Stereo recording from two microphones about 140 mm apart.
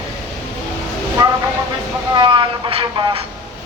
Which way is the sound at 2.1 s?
35° right (ahead or behind).